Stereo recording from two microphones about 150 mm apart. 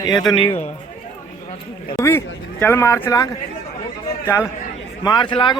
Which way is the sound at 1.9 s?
15° left (ahead or behind).